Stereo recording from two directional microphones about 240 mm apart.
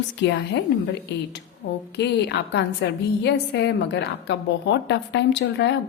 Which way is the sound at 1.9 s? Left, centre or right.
Left.